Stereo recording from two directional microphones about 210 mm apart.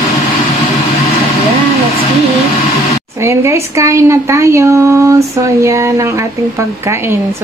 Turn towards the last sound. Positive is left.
turn(degrees=-15)  # may be behind; listen again after turning